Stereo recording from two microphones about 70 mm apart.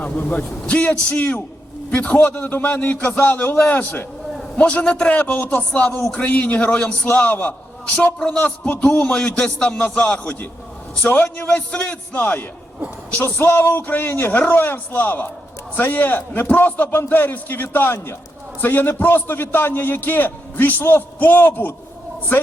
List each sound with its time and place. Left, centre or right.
0.0 s a man's voice: left
11.0 s a man's voice: left